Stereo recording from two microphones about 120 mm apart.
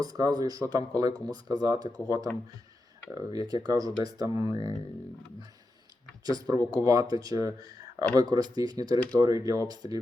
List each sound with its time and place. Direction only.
0.0 s speech: 35° right (ahead or behind)
4.3 s speech: 45° left (ahead or behind)
6.2 s speech: 30° right (ahead or behind)